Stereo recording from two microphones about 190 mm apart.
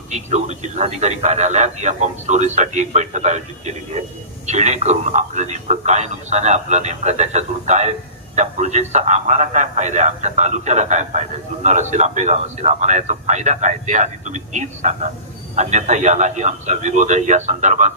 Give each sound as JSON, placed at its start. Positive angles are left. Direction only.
{"t": 0.1, "sound": "a man's voice", "side_deg": -35}
{"t": 4.4, "sound": "a man's voice", "side_deg": -35}